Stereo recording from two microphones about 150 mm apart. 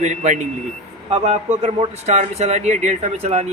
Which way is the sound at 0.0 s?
50° right (ahead or behind).